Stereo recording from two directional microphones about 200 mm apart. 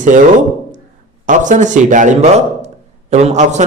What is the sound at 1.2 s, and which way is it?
A man's voice, 40° right (ahead or behind).